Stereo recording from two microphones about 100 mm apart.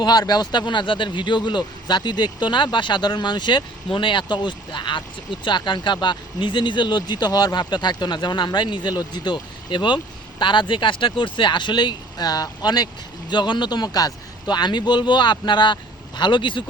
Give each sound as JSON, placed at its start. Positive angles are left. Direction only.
{"t": 0.0, "sound": "speech", "side_deg": 45}